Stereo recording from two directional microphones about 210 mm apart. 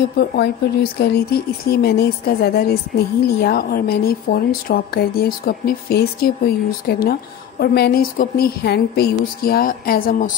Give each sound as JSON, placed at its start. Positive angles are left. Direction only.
{"t": 0.2, "sound": "a woman's voice", "side_deg": 45}